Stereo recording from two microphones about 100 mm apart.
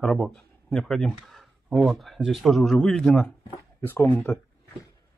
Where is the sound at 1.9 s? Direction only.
Centre (ahead or behind).